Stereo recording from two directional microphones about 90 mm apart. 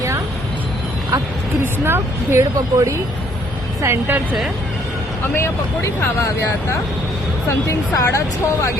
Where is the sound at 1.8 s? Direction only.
25° right (ahead or behind).